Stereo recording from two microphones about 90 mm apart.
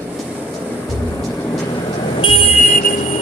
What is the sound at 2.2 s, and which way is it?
Vehicle, 90° left.